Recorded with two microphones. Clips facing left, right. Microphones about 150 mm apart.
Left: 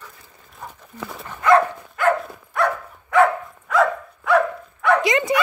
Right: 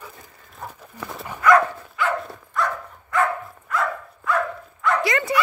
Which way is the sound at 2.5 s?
65° left (ahead or behind).